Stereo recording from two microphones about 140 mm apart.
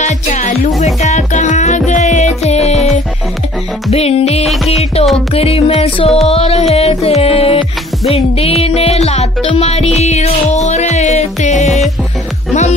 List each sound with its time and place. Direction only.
0.0 s music: 55° left (ahead or behind)
3.9 s music: 50° left (ahead or behind)